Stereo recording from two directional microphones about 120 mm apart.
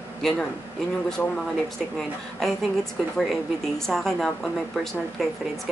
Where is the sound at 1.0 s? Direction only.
5° left (ahead or behind).